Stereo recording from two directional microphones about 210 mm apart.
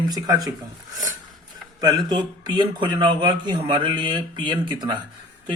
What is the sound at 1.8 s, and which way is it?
Speech, 20° right (ahead or behind).